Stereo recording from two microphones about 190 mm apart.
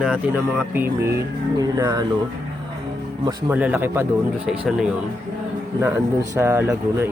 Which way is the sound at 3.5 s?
10° right (ahead or behind).